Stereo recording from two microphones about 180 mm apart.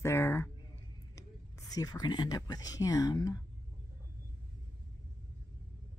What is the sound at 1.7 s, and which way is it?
Speech, 20° left (ahead or behind).